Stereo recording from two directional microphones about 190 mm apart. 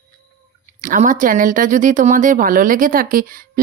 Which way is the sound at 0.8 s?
45° right (ahead or behind).